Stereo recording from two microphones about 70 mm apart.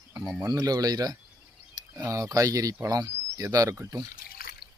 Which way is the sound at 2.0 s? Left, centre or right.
Right.